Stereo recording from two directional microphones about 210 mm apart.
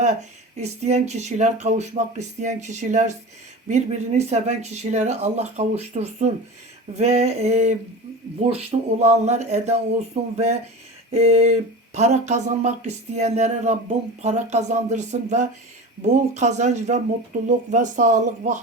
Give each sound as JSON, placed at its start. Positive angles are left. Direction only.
{"t": 0.6, "sound": "speech", "side_deg": -30}